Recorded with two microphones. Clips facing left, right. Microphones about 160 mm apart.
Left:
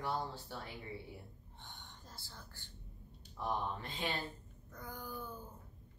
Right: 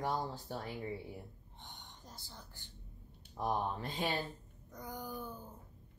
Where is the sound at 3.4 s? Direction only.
40° right (ahead or behind).